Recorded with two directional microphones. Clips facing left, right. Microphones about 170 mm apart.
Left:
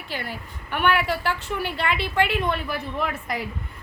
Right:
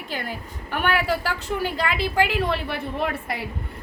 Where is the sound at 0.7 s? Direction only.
40° right (ahead or behind).